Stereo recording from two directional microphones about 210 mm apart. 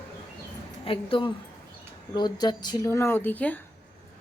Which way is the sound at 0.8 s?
25° left (ahead or behind).